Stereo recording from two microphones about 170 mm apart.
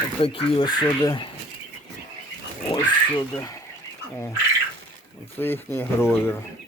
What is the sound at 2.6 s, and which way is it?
Speech, 15° left (ahead or behind).